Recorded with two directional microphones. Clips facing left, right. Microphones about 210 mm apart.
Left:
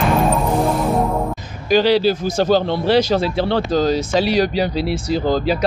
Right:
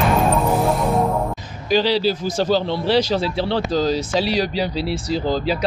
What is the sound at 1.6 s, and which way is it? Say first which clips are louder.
Speech: left 4 dB; 50° left (ahead or behind).